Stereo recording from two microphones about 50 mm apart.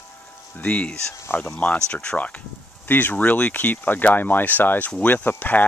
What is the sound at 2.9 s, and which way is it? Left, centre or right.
Speech, left.